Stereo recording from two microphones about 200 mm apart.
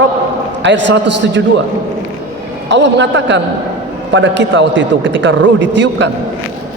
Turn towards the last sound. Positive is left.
turn(degrees=-60)  # may be behind; listen again after turning